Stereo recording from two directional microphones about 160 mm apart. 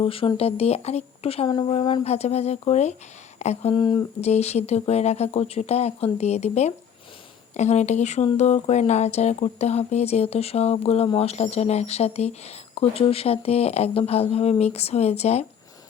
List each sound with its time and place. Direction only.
0.0 s speech: 35° left (ahead or behind)
4.2 s speech: 40° left (ahead or behind)